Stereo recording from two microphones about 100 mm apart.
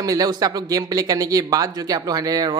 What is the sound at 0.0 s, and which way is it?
Speech, 40° right (ahead or behind).